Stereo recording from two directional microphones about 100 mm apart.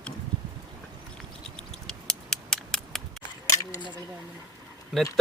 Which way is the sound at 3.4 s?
30° left (ahead or behind).